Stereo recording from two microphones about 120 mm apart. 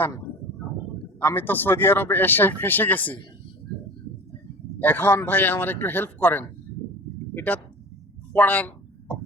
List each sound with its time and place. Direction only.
1.2 s speech: 15° left (ahead or behind)
4.8 s speech: 15° left (ahead or behind)
8.3 s a sound: 15° left (ahead or behind)